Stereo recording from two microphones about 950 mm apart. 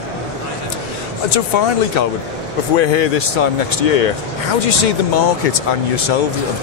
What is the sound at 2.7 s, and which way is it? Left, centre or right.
Speech, left.